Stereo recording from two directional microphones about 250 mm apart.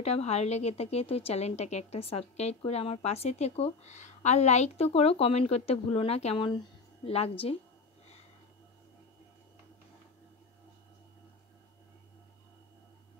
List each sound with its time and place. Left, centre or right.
0.0 s a woman's voice: left